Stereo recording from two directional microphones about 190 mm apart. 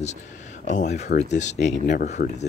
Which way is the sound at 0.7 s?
40° left (ahead or behind).